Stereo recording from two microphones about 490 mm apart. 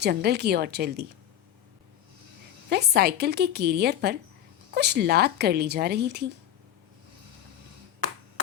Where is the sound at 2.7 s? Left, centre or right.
Centre.